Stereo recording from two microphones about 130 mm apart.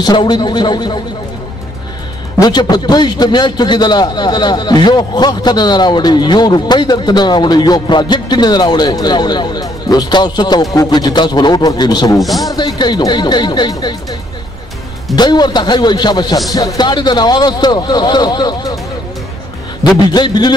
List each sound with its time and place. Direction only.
0.0 s a man's voice: 35° left (ahead or behind)
2.3 s a man's voice: 30° left (ahead or behind)
12.2 s a man's voice: centre (ahead or behind)
12.4 s a man's voice: 30° left (ahead or behind)
15.1 s a man's voice: 35° left (ahead or behind)
19.8 s a man's voice: 30° left (ahead or behind)